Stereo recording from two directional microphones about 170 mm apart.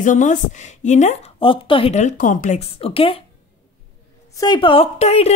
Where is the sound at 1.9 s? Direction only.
45° left (ahead or behind).